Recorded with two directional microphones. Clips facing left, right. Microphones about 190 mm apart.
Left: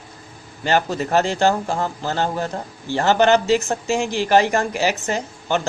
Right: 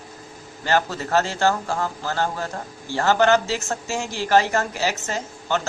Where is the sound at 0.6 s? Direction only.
15° left (ahead or behind).